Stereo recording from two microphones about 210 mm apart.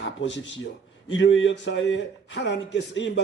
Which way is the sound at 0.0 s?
60° left (ahead or behind).